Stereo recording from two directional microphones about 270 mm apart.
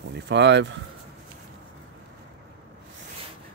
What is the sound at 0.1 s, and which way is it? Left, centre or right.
Speech, right.